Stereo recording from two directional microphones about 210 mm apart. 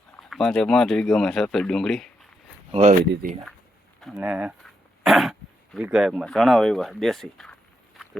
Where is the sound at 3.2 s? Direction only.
45° right (ahead or behind).